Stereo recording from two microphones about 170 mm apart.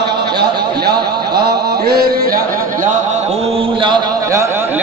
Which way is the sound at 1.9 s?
60° right (ahead or behind).